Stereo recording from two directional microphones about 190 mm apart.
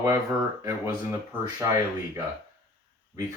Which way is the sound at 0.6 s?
15° right (ahead or behind).